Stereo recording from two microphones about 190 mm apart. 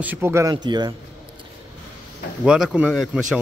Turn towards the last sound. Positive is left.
turn(degrees=0)  # may be behind; listen again after turning